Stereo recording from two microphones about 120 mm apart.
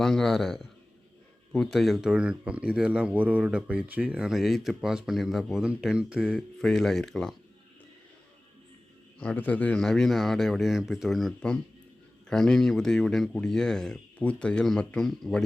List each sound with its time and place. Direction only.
0.0 s speech: 5° left (ahead or behind)
9.1 s speech: 10° left (ahead or behind)